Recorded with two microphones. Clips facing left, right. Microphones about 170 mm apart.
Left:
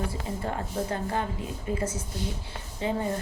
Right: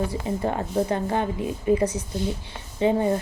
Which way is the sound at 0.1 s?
20° right (ahead or behind).